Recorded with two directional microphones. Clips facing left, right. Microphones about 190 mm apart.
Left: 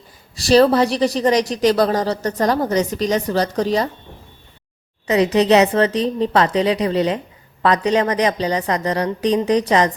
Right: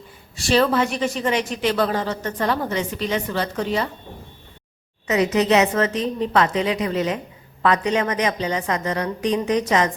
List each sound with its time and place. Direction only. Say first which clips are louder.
0.3 s a woman's voice: left 6 dB; 40° left (ahead or behind)
5.0 s a woman's voice: left 4 dB; 35° left (ahead or behind)